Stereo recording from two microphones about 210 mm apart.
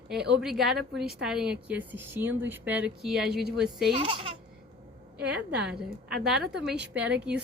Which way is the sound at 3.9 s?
25° right (ahead or behind).